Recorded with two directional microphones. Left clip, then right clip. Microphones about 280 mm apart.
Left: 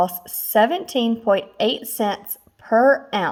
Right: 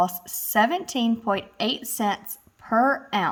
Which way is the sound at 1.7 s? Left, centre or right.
Centre.